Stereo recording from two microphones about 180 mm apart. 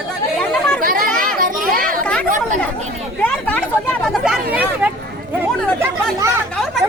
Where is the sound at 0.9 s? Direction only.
50° right (ahead or behind).